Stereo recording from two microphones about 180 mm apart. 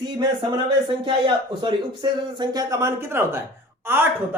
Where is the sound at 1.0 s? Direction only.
25° right (ahead or behind).